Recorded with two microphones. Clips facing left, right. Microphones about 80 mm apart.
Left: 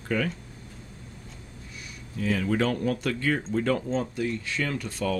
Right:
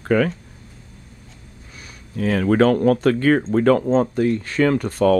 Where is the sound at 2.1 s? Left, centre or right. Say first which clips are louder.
Right 8 dB; right.